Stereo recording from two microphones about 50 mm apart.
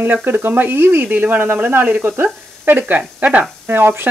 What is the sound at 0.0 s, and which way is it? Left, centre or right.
Speech, right.